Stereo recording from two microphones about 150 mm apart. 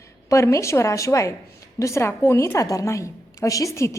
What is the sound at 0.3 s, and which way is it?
A woman's voice, 20° left (ahead or behind).